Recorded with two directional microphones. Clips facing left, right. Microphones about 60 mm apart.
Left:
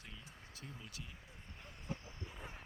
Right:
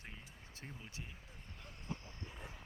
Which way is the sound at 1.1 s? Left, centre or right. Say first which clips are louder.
Even; centre.